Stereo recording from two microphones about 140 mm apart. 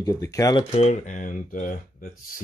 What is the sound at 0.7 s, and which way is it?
Speech, 50° left (ahead or behind).